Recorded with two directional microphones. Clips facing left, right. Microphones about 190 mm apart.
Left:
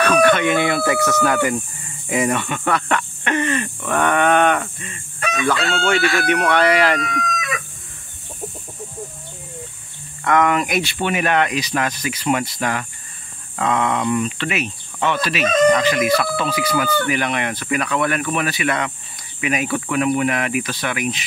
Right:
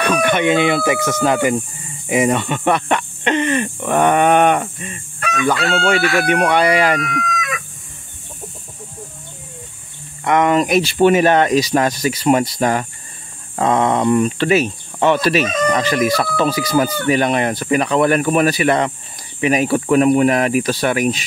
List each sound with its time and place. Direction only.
0.0 s speech: 20° right (ahead or behind)
5.3 s chicken: 5° right (ahead or behind)
10.2 s speech: 20° right (ahead or behind)
10.6 s speech: 35° right (ahead or behind)